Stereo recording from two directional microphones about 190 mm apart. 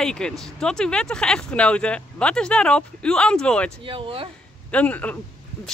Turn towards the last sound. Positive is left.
turn(degrees=10)  # may be behind; listen again after turning